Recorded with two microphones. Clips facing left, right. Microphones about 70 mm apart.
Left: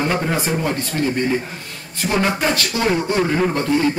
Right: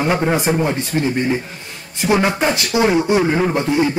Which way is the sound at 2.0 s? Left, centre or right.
Centre.